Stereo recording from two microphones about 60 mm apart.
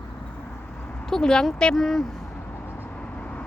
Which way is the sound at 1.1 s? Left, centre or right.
Centre.